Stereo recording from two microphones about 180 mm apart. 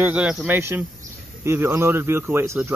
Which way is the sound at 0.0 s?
5° right (ahead or behind).